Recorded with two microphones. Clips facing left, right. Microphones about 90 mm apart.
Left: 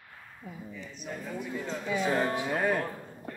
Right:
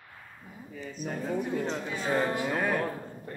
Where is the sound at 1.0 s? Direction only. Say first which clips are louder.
Right 6 dB; 45° right (ahead or behind).